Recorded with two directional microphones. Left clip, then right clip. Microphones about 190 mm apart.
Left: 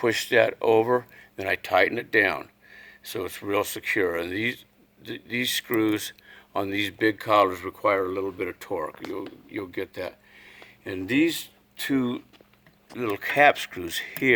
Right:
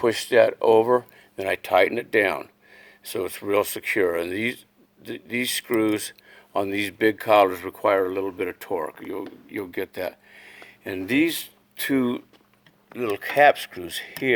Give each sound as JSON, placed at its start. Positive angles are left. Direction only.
{"t": 0.0, "sound": "speech", "side_deg": -20}
{"t": 13.0, "sound": "speech", "side_deg": -10}